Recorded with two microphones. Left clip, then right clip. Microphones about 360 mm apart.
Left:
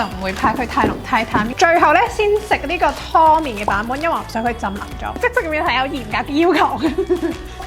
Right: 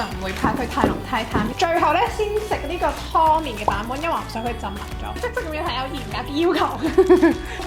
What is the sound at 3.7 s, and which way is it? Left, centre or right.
Speech, left.